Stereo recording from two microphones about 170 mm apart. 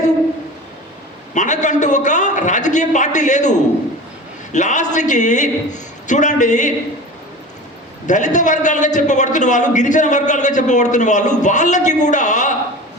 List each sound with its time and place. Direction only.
1.3 s a man's voice: 45° left (ahead or behind)
8.0 s a man's voice: 45° left (ahead or behind)